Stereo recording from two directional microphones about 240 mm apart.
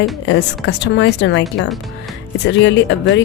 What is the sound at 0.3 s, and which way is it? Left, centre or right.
Speech, left.